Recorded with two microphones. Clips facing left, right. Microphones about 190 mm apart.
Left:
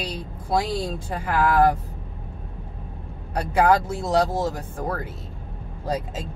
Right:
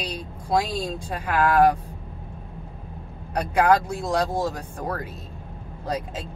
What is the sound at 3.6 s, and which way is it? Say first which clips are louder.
Speech: even; 5° left (ahead or behind).